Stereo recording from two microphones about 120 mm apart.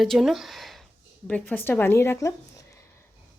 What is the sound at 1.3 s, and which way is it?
Speech, 15° left (ahead or behind).